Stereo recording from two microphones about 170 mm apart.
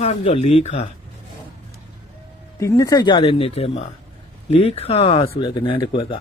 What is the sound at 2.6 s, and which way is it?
Speech, 20° left (ahead or behind).